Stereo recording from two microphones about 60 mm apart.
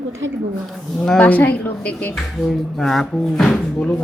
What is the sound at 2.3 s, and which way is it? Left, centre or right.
Speech, centre.